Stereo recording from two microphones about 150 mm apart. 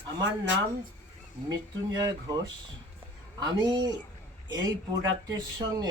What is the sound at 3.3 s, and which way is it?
Speech, 30° right (ahead or behind).